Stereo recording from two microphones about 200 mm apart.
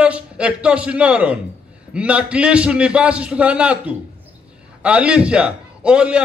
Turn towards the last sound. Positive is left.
turn(degrees=-5)  # may be behind; listen again after turning